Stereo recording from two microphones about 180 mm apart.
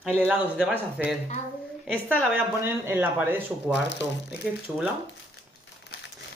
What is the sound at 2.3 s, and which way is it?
Speech, 15° right (ahead or behind).